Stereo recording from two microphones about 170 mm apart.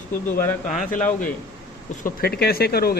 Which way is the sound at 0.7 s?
50° left (ahead or behind).